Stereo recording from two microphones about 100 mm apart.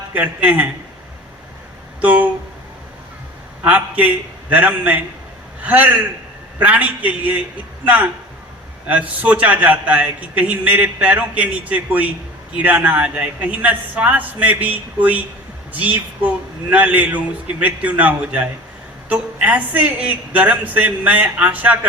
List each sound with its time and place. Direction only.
0.1 s a man's voice: 15° right (ahead or behind)
2.0 s speech: 15° right (ahead or behind)
3.6 s a man's voice: 15° right (ahead or behind)